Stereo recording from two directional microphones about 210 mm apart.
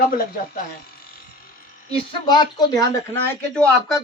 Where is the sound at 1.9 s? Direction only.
20° left (ahead or behind).